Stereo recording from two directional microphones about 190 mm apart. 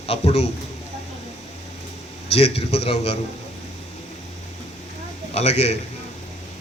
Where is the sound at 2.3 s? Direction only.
30° left (ahead or behind).